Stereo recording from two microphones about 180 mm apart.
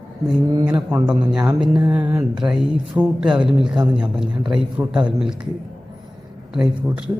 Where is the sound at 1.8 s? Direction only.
10° right (ahead or behind).